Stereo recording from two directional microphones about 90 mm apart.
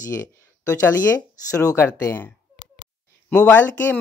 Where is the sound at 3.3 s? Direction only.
15° left (ahead or behind).